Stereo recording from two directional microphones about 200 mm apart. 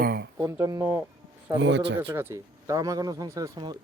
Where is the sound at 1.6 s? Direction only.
60° right (ahead or behind).